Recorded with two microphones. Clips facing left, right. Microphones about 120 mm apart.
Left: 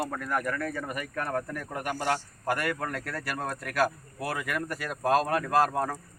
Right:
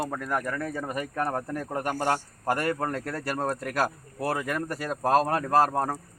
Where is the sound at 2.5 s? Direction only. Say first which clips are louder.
Right 3 dB; 30° right (ahead or behind).